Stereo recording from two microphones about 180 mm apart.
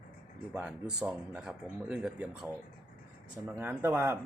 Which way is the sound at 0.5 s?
5° right (ahead or behind).